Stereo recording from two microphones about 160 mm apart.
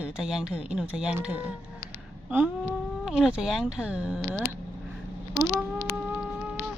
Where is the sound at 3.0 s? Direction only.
5° right (ahead or behind).